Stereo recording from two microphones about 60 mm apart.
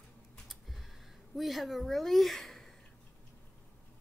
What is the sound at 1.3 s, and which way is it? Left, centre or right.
A woman's voice, centre.